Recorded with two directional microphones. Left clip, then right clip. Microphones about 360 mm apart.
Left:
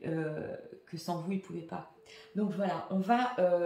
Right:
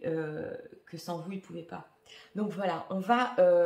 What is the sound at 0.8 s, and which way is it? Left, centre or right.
Speech, centre.